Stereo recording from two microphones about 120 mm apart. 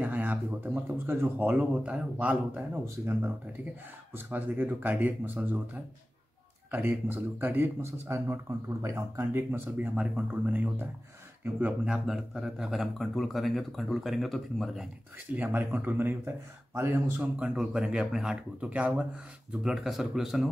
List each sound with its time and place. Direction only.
0.0 s speech: 15° right (ahead or behind)
6.7 s speech: 15° right (ahead or behind); by 14.9 s centre (ahead or behind)
15.3 s speech: 15° right (ahead or behind)
17.4 s speech: 5° right (ahead or behind)